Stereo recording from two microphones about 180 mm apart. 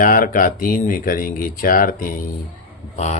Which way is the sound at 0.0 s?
50° left (ahead or behind).